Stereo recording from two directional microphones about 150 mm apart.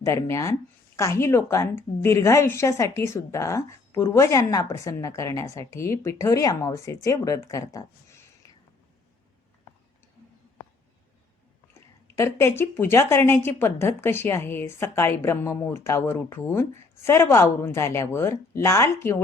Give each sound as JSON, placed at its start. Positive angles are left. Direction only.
{"t": 0.0, "sound": "a woman's voice", "side_deg": 20}
{"t": 11.7, "sound": "speech", "side_deg": 20}